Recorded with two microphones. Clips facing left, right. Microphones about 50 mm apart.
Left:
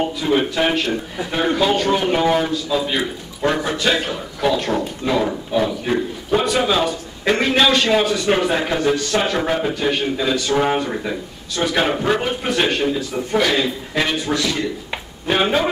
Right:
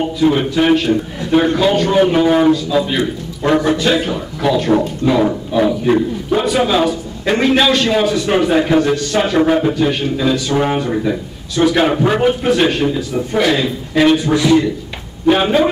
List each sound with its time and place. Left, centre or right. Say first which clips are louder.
0.2 s a man's voice: right 6 dB; centre
14.3 s a man's voice: right 9 dB; centre
15.2 s a man's voice: right 6 dB; centre